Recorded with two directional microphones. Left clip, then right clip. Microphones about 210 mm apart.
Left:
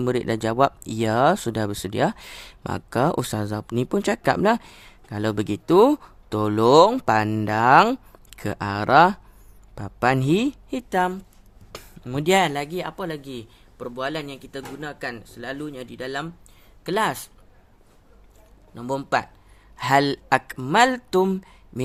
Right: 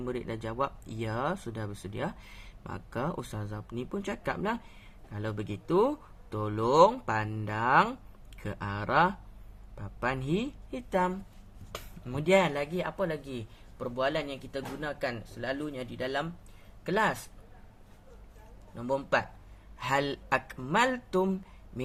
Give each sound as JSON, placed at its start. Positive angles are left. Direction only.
{"t": 0.0, "sound": "speech", "side_deg": 55}
{"t": 11.7, "sound": "a sound", "side_deg": 30}
{"t": 12.1, "sound": "speech", "side_deg": 55}
{"t": 16.8, "sound": "speech", "side_deg": 55}
{"t": 18.8, "sound": "speech", "side_deg": 50}